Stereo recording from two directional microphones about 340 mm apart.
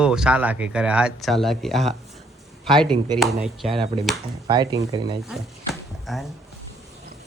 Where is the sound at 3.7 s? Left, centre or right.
Centre.